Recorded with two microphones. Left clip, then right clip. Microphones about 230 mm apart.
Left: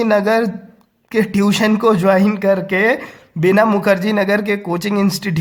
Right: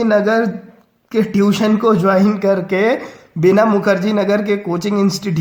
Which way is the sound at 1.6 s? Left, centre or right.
Left.